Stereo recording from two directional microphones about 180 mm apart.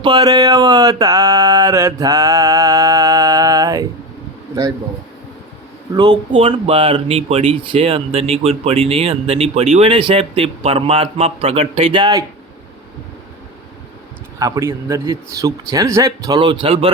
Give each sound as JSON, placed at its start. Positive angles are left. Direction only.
{"t": 0.0, "sound": "a sound", "side_deg": -25}
{"t": 5.9, "sound": "speech", "side_deg": -25}
{"t": 14.3, "sound": "a man's voice", "side_deg": -20}